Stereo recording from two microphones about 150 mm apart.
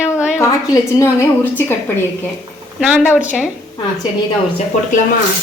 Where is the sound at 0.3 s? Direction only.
20° left (ahead or behind).